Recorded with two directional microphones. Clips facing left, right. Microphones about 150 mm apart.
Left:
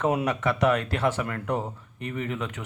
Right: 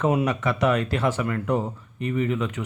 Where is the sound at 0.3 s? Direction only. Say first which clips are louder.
Right 1 dB; 55° left (ahead or behind).